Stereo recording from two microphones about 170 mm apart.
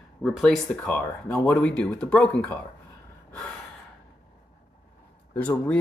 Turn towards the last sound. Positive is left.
turn(degrees=10)  # may be behind; listen again after turning